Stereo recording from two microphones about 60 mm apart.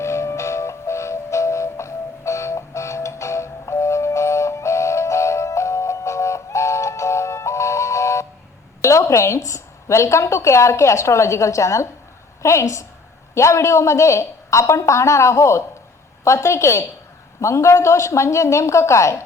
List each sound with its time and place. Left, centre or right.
0.0 s music: left
8.8 s a woman's voice: left